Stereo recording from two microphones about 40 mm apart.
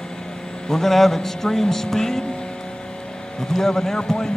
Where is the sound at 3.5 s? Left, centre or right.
Centre.